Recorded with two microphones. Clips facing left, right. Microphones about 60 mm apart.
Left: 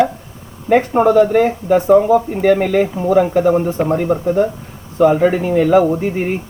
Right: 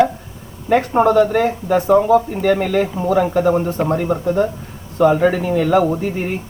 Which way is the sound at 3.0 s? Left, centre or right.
Centre.